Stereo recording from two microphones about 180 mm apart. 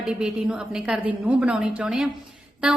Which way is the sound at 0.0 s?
5° right (ahead or behind).